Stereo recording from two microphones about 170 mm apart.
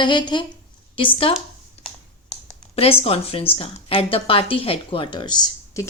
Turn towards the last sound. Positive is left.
turn(degrees=20)  # may be behind; listen again after turning